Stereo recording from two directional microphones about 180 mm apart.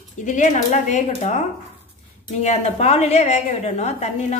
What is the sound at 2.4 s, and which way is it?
A woman's voice, 40° left (ahead or behind).